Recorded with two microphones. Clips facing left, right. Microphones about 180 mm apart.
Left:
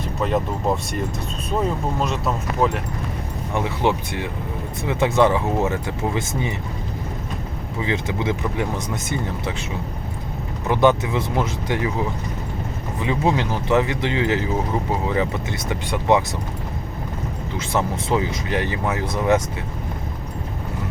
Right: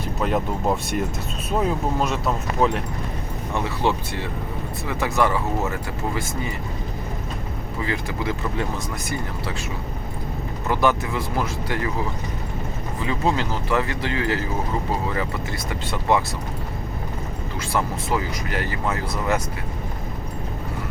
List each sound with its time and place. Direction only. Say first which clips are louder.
1.5 s speech: even; 5° right (ahead or behind)
3.5 s speech: left 2 dB; 15° left (ahead or behind)
7.8 s speech: left 3 dB; 20° left (ahead or behind)
10.7 s speech: left 4 dB; 20° left (ahead or behind)
13.0 s speech: left 2 dB; 20° left (ahead or behind)
17.6 s speech: left 2 dB; 20° left (ahead or behind)